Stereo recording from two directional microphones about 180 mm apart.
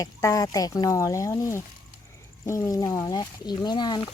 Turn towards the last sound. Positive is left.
turn(degrees=25)  # may be behind; listen again after turning